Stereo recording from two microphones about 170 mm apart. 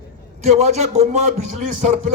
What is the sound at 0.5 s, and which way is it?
Speech, 40° right (ahead or behind).